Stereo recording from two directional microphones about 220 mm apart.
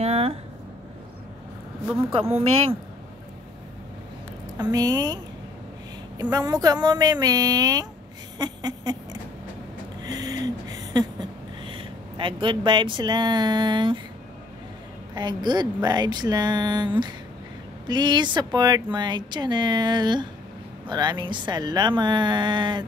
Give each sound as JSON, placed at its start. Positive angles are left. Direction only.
{"t": 0.0, "sound": "a sound", "side_deg": -30}
{"t": 4.6, "sound": "speech", "side_deg": -15}
{"t": 6.3, "sound": "speech", "side_deg": -15}
{"t": 8.4, "sound": "rodents", "side_deg": -20}
{"t": 10.0, "sound": "a sound", "side_deg": -15}
{"t": 15.1, "sound": "speech", "side_deg": -20}